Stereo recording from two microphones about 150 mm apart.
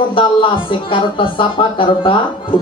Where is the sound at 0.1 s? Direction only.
35° left (ahead or behind).